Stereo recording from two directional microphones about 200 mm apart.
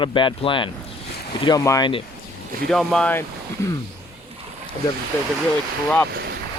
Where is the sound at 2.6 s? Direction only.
Centre (ahead or behind).